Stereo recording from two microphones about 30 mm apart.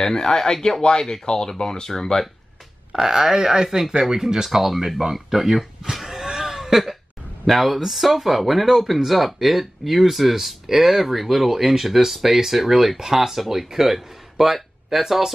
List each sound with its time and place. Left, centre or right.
0.0 s speech: centre
2.9 s speech: centre
6.2 s a sound: centre
7.4 s speech: centre